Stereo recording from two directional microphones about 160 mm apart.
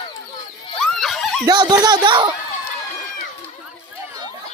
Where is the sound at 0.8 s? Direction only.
Centre (ahead or behind).